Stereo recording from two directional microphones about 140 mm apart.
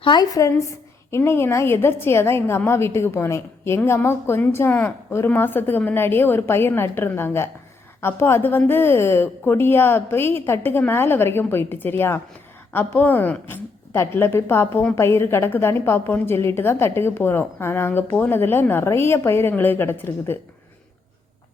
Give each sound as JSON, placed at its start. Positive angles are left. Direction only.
{"t": 0.0, "sound": "a woman's voice", "side_deg": 30}